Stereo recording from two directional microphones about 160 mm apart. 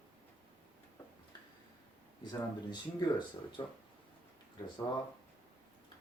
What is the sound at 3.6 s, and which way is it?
Speech, 30° left (ahead or behind).